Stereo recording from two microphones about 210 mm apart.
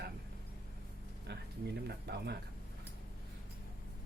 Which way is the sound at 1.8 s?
50° right (ahead or behind).